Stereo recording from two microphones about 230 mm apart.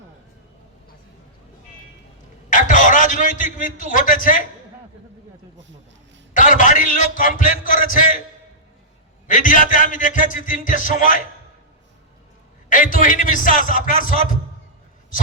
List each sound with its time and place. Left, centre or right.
2.5 s a man's voice: left
6.3 s a man's voice: left
9.2 s a man's voice: left
12.6 s a man's voice: left